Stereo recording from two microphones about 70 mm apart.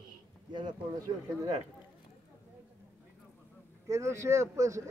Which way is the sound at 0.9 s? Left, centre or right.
Right.